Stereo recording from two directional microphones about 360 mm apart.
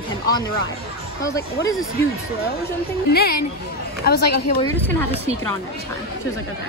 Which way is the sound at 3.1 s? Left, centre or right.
Left.